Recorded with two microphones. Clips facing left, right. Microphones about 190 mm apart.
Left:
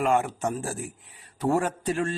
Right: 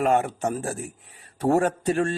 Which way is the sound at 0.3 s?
40° right (ahead or behind).